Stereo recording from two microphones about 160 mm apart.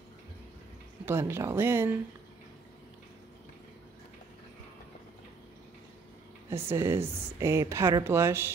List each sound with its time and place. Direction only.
1.0 s speech: 15° right (ahead or behind)
6.5 s speech: 15° right (ahead or behind)